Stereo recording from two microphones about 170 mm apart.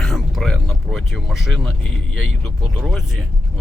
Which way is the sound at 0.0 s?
Centre (ahead or behind).